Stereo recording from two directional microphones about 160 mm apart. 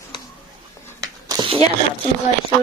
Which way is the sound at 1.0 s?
25° right (ahead or behind).